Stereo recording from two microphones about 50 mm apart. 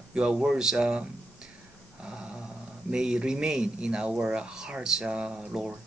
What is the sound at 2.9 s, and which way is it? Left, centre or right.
Speech, centre.